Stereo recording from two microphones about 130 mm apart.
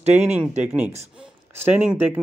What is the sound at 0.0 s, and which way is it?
Speech, 60° right (ahead or behind).